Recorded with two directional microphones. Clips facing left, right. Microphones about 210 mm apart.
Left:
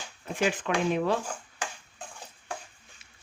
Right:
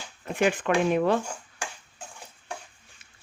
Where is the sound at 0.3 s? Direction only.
55° right (ahead or behind).